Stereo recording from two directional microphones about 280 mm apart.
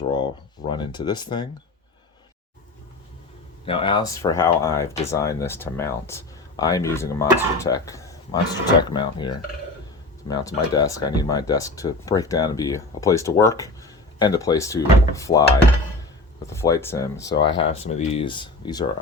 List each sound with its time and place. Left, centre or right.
0.1 s speech: centre
3.7 s speech: centre
16.5 s speech: centre